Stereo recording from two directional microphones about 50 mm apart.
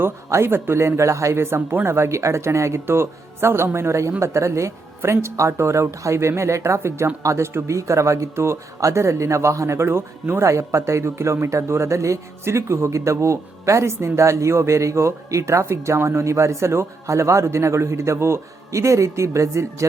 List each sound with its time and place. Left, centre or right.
0.4 s a man's voice: right
2.8 s a man's voice: right
7.2 s a man's voice: right
10.5 s a man's voice: right